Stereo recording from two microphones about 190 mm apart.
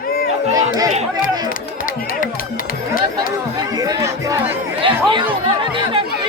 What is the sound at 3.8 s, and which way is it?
Chatter, 20° right (ahead or behind).